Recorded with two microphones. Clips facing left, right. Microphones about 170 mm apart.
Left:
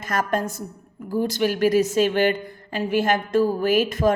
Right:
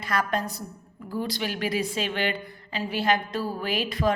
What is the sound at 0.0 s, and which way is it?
A woman's voice, 45° left (ahead or behind).